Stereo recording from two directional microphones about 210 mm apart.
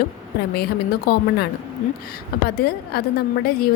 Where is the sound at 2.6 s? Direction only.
50° left (ahead or behind).